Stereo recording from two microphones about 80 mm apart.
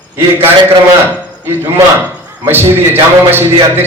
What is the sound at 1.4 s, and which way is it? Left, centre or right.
A man's voice, right.